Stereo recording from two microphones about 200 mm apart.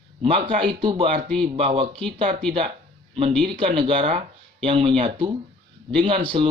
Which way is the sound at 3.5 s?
25° right (ahead or behind).